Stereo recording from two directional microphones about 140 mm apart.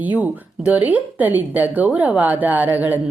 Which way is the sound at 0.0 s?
10° right (ahead or behind).